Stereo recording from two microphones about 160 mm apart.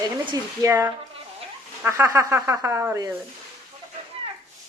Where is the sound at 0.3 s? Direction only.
20° right (ahead or behind).